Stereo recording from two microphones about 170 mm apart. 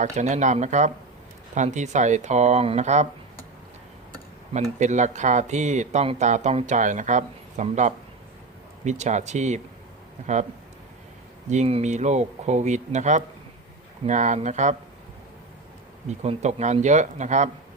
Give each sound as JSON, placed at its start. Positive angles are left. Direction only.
{"t": 0.0, "sound": "speech", "side_deg": -45}
{"t": 4.8, "sound": "speech", "side_deg": -45}
{"t": 11.4, "sound": "speech", "side_deg": -40}
{"t": 16.0, "sound": "speech", "side_deg": -40}